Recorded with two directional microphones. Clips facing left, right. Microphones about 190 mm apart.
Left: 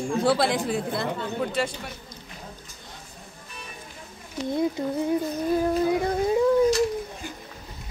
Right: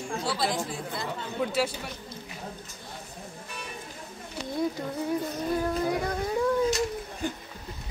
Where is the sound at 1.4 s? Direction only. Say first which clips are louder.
Right 1 dB; 5° right (ahead or behind).